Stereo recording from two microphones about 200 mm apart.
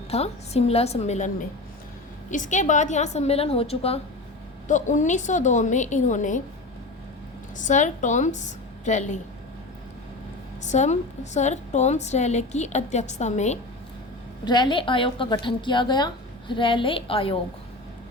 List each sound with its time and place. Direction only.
0.1 s a woman's voice: 30° left (ahead or behind)
2.3 s a woman's voice: 40° left (ahead or behind)
7.7 s a woman's voice: 35° left (ahead or behind)
10.7 s a woman's voice: 35° left (ahead or behind)
14.4 s a woman's voice: 20° left (ahead or behind)